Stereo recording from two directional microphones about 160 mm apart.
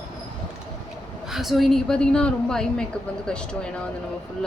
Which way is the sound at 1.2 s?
Centre (ahead or behind).